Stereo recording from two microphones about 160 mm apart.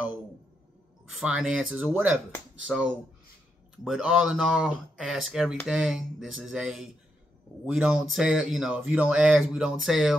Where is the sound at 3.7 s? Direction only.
5° right (ahead or behind).